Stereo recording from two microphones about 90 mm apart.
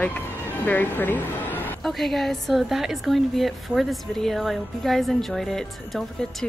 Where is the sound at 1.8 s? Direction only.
Centre (ahead or behind).